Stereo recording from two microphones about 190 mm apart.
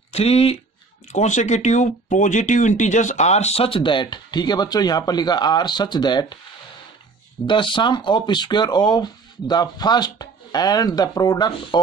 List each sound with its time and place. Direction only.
0.1 s speech: 35° left (ahead or behind)
7.4 s speech: 25° left (ahead or behind)